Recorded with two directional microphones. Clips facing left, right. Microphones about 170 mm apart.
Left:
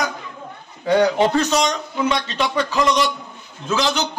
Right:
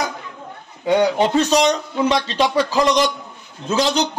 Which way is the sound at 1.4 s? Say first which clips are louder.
Right 3 dB; 35° right (ahead or behind).